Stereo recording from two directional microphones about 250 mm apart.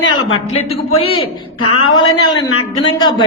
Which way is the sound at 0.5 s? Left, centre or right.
Left.